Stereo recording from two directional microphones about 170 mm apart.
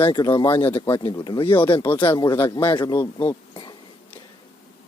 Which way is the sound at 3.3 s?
30° left (ahead or behind).